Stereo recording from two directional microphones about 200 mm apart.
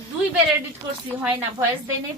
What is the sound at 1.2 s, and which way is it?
Speech, 10° right (ahead or behind).